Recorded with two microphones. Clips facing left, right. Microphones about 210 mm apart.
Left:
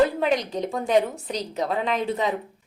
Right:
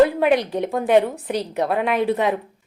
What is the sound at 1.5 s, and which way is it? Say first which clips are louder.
Speech: right 4 dB; 60° right (ahead or behind).